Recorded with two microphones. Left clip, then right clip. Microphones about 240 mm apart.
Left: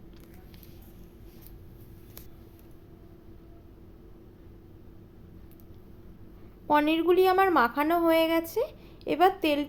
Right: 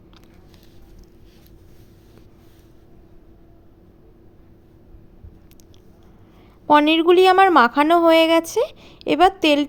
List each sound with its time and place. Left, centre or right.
6.7 s speech: right